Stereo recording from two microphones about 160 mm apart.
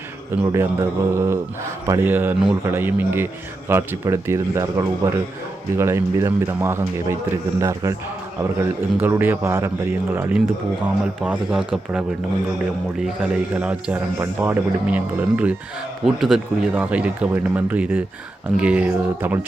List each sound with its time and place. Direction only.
0.3 s a man's voice: 20° right (ahead or behind)
9.0 s a man's voice: 15° right (ahead or behind)
13.6 s a man's voice: 10° right (ahead or behind)